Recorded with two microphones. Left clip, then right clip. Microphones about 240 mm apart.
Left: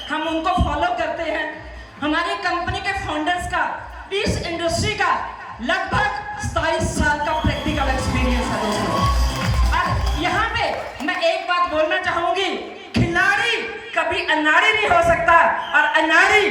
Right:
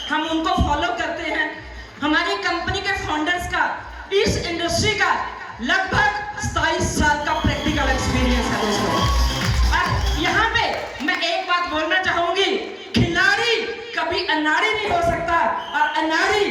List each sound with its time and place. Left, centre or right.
0.1 s a man's voice: centre
6.5 s music: centre
9.7 s music: centre
12.9 s a sound: centre
13.9 s a man's voice: centre